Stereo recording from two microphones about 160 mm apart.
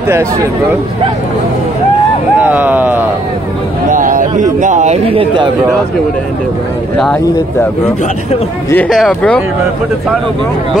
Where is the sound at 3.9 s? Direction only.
55° right (ahead or behind).